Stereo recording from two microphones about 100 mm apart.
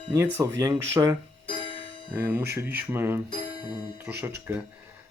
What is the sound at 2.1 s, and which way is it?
Speech, 20° right (ahead or behind).